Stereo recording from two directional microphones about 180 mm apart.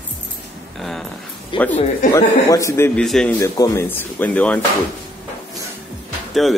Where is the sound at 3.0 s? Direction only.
Centre (ahead or behind).